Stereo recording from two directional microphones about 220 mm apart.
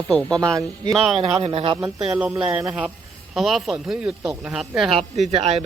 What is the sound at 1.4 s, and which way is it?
Speech, 25° right (ahead or behind).